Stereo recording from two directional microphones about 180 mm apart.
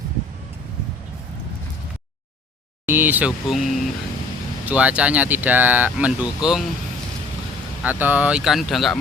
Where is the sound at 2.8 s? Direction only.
10° right (ahead or behind).